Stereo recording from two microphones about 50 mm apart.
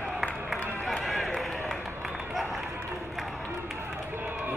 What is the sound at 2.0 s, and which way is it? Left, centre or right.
Run, centre.